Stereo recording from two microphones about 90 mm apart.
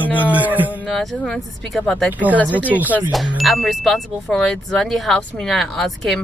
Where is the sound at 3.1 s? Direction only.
Centre (ahead or behind).